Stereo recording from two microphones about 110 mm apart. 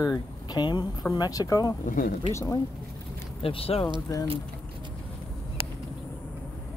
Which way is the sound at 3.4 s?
60° left (ahead or behind).